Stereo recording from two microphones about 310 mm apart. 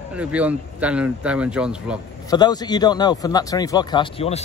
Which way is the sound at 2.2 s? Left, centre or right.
Centre.